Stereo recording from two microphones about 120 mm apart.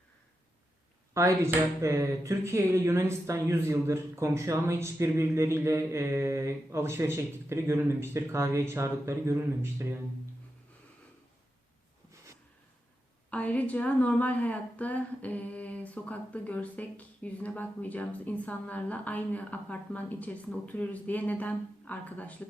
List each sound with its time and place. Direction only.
1.1 s speech: 25° right (ahead or behind)
13.3 s a woman's voice: 10° left (ahead or behind)